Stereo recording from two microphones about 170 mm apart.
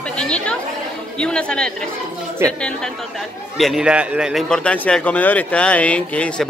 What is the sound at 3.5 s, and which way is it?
A man's voice, centre (ahead or behind).